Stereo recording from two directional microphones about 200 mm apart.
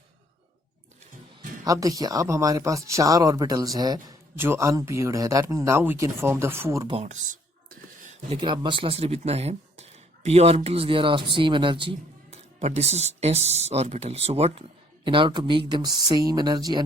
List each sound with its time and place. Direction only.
1.4 s speech: 15° right (ahead or behind)
6.9 s speech: 35° right (ahead or behind)
7.7 s a sound: 40° right (ahead or behind)
8.4 s speech: 25° right (ahead or behind)